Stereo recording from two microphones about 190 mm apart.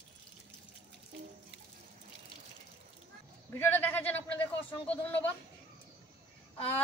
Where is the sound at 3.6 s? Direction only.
10° left (ahead or behind).